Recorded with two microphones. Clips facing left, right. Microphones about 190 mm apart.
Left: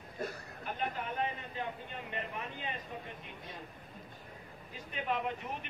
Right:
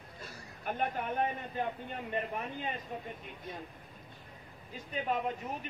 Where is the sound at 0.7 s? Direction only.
50° right (ahead or behind).